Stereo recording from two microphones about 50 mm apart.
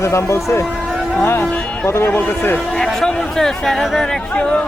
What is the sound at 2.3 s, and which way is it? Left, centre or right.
Speech, left.